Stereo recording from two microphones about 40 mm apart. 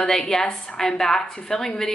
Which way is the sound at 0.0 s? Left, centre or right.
Centre.